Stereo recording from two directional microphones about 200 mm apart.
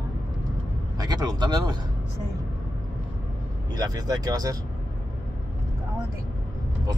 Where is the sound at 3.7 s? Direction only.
20° right (ahead or behind).